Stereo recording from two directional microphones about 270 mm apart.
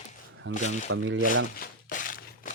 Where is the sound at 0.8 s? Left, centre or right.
Right.